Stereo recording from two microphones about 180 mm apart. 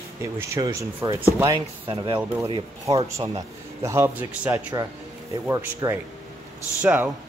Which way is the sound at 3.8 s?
15° right (ahead or behind).